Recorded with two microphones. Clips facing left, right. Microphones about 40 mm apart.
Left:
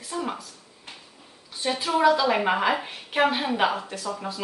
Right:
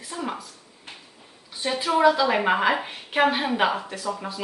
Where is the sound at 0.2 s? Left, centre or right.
Centre.